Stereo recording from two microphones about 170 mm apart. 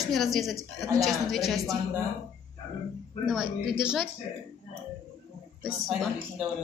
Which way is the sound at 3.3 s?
5° right (ahead or behind).